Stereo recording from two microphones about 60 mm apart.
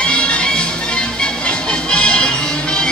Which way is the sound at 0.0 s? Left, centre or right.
Centre.